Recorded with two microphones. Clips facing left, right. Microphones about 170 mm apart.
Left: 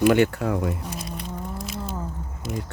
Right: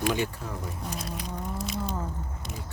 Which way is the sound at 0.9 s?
Centre (ahead or behind).